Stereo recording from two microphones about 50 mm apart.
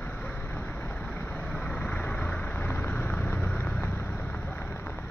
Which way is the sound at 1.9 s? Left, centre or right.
Left.